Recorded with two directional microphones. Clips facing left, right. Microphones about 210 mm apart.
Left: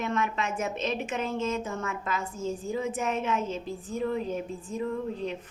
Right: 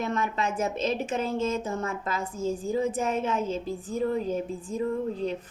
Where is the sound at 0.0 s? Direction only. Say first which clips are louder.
Right 1 dB; 35° right (ahead or behind).